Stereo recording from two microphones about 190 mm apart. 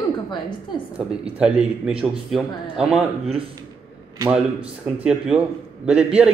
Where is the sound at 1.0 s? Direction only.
5° right (ahead or behind).